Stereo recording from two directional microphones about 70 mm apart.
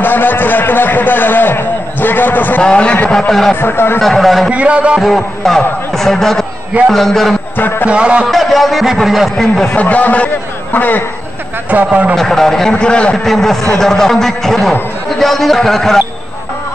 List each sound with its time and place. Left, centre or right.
0.0 s a sound: left
2.6 s a man's voice: centre
3.2 s a man's voice: centre
3.6 s speech: left
4.0 s a man's voice: centre
4.5 s speech: centre
5.0 s a man's voice: centre
7.5 s a man's voice: left
7.9 s speech: centre
8.3 s a man's voice: centre
9.8 s a man's voice: left
11.7 s a man's voice: centre
12.2 s a man's voice: centre